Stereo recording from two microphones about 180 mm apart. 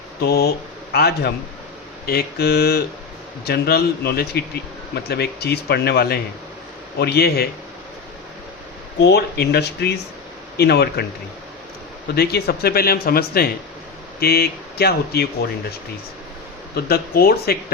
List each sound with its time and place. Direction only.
0.2 s a man's voice: 60° left (ahead or behind)
9.0 s a man's voice: 65° left (ahead or behind)
12.1 s a man's voice: 60° left (ahead or behind)
16.7 s a man's voice: 60° left (ahead or behind)